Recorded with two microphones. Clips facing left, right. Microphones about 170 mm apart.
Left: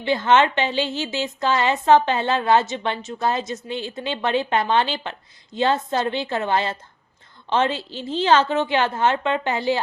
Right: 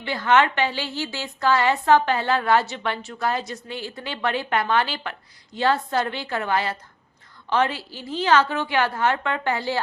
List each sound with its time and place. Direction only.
0.0 s a woman's voice: 25° left (ahead or behind)